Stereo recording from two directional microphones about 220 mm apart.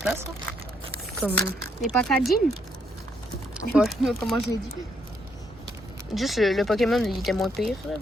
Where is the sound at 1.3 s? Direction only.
Centre (ahead or behind).